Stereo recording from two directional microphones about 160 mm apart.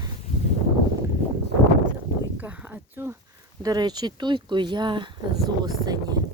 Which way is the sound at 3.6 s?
25° right (ahead or behind).